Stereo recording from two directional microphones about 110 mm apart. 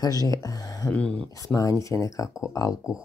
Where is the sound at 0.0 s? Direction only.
35° left (ahead or behind).